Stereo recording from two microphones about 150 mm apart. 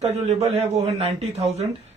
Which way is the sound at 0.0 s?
45° right (ahead or behind).